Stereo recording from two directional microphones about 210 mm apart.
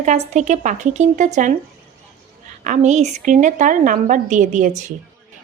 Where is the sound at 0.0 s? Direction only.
35° right (ahead or behind).